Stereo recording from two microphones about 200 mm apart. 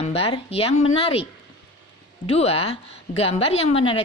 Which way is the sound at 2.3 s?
30° left (ahead or behind).